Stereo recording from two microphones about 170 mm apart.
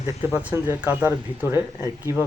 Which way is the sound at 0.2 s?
15° right (ahead or behind).